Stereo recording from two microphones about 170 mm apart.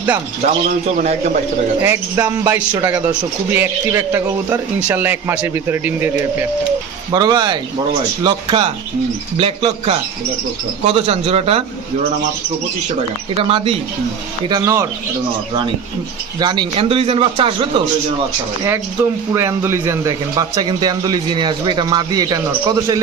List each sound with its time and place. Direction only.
0.4 s a man's voice: 40° right (ahead or behind)
1.8 s a man's voice: 10° right (ahead or behind)
7.1 s a man's voice: 25° right (ahead or behind)
10.9 s a man's voice: 35° right (ahead or behind)
13.3 s a man's voice: 35° right (ahead or behind)
14.4 s a man's voice: 20° right (ahead or behind)
16.4 s a man's voice: 25° right (ahead or behind)
19.3 s a man's voice: 15° right (ahead or behind)